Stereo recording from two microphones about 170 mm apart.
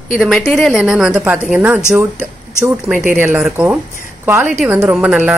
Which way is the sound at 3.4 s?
5° right (ahead or behind).